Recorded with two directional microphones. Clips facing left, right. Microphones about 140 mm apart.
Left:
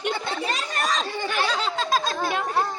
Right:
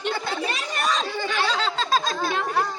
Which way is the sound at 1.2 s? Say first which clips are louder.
Right 1 dB; 15° left (ahead or behind).